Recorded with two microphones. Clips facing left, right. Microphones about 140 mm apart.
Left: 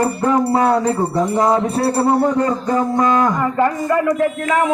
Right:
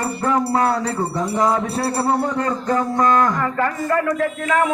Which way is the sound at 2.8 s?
20° left (ahead or behind).